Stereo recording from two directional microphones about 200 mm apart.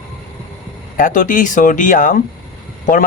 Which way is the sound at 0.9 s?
40° left (ahead or behind).